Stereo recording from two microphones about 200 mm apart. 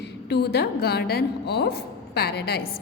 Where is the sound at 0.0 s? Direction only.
55° left (ahead or behind).